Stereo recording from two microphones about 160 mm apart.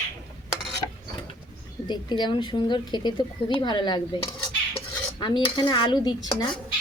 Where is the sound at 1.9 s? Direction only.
30° left (ahead or behind).